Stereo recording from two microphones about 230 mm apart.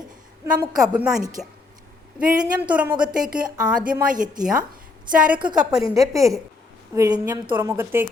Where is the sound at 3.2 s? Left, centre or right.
Right.